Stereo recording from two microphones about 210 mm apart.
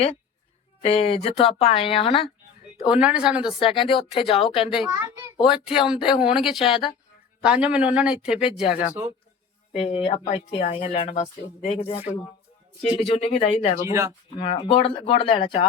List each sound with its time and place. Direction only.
0.8 s speech: 30° left (ahead or behind)
2.8 s speech: 5° right (ahead or behind)
3.8 s speech: 25° left (ahead or behind)
4.6 s a child's voice: centre (ahead or behind)
9.7 s speech: 30° left (ahead or behind)
13.0 s speech: 25° left (ahead or behind)
13.8 s a child's voice: 15° right (ahead or behind)
14.3 s speech: 25° left (ahead or behind)